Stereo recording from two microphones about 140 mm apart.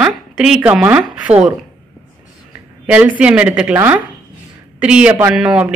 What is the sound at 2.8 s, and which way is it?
A woman's voice, 10° right (ahead or behind).